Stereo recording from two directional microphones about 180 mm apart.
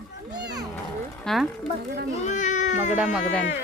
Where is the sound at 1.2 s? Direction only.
Centre (ahead or behind).